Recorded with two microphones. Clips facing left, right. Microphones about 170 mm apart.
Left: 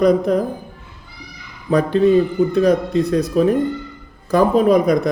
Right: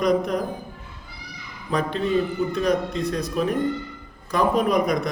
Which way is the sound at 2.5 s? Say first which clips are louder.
Left 7 dB; 35° left (ahead or behind).